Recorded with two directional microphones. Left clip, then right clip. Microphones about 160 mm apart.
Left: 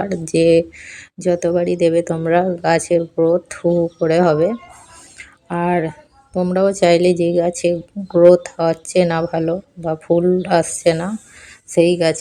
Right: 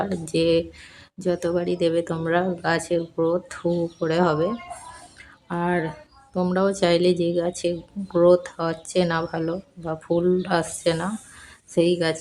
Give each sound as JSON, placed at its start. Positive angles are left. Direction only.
{"t": 0.0, "sound": "a woman's voice", "side_deg": 20}
{"t": 5.1, "sound": "a sound", "side_deg": 20}
{"t": 6.3, "sound": "a woman's voice", "side_deg": 20}